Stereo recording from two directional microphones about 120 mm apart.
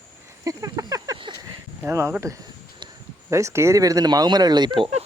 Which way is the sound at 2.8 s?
40° right (ahead or behind).